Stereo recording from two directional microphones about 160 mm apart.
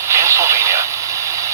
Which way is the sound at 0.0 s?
15° right (ahead or behind).